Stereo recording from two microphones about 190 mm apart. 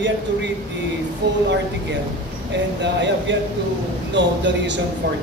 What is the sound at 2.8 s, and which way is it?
A man's voice, 70° right (ahead or behind).